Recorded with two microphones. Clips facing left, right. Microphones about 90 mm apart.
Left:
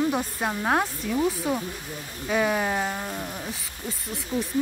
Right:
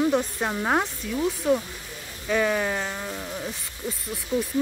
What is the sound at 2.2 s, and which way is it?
Speech, 10° left (ahead or behind).